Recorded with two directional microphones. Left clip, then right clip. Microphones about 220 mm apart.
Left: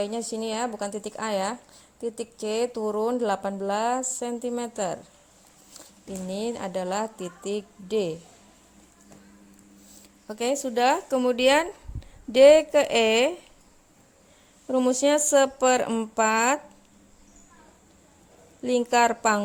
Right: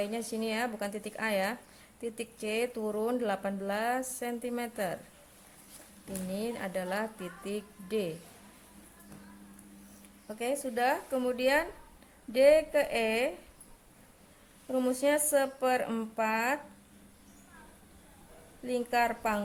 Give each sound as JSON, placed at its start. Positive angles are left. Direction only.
{"t": 0.0, "sound": "speech", "side_deg": 25}
{"t": 6.3, "sound": "speech", "side_deg": 30}
{"t": 10.2, "sound": "speech", "side_deg": 35}
{"t": 14.7, "sound": "speech", "side_deg": 30}
{"t": 18.6, "sound": "speech", "side_deg": 35}